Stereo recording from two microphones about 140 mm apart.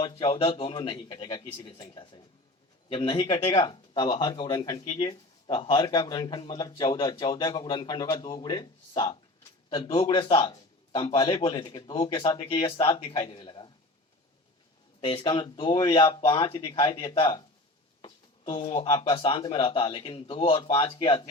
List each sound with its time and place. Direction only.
0.0 s speech: 40° left (ahead or behind)
3.2 s speech: 25° left (ahead or behind)
5.5 s speech: 35° left (ahead or behind)
15.0 s speech: 35° left (ahead or behind)
16.0 s speech: 20° left (ahead or behind)
16.3 s speech: 35° left (ahead or behind)
18.0 s a sound: 35° left (ahead or behind)
18.8 s speech: 35° left (ahead or behind)